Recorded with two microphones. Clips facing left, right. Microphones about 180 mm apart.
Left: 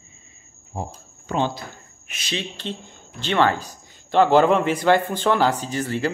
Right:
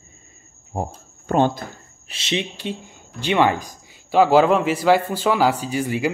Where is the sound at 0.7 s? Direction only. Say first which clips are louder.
Right 4 dB; 50° right (ahead or behind).